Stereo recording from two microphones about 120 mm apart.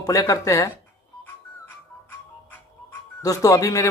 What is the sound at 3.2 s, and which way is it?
Speech, 30° left (ahead or behind).